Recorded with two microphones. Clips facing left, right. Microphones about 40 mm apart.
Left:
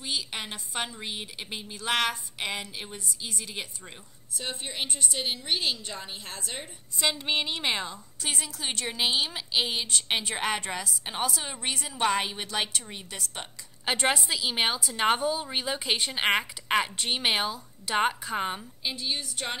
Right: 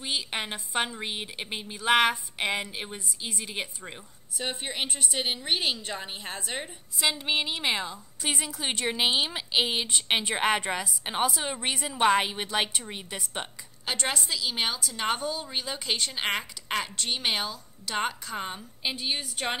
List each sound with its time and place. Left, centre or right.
0.0 s a woman's voice: centre
7.0 s a woman's voice: centre
8.2 s a woman's voice: centre
13.8 s a woman's voice: centre
18.8 s a woman's voice: centre